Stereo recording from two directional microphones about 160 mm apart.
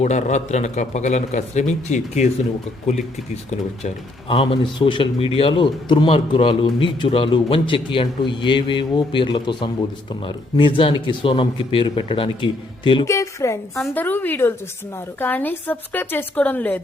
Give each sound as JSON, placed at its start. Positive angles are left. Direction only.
{"t": 0.0, "sound": "a man's voice", "side_deg": 45}
{"t": 3.5, "sound": "a man's voice", "side_deg": 40}
{"t": 13.1, "sound": "a woman's voice", "side_deg": 20}